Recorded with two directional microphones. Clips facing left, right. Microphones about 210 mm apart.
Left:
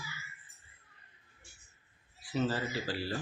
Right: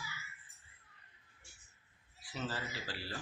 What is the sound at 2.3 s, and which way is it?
Speech, 40° left (ahead or behind).